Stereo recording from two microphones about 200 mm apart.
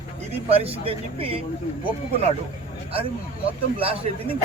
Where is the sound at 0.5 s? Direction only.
30° right (ahead or behind).